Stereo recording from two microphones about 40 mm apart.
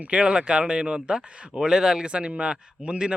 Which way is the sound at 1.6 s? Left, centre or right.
Centre.